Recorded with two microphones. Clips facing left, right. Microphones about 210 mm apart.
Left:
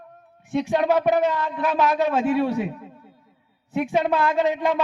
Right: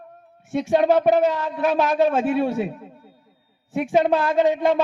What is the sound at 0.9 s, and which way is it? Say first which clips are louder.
Speech: right 1 dB; 35° right (ahead or behind).